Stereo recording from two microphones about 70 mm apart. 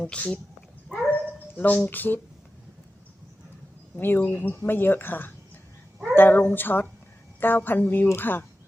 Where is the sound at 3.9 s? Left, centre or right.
Left.